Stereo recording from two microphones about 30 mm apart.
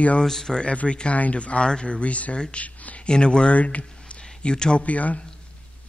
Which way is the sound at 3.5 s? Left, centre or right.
Left.